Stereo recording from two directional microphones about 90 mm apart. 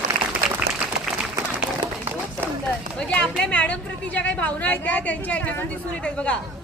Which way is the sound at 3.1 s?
15° left (ahead or behind).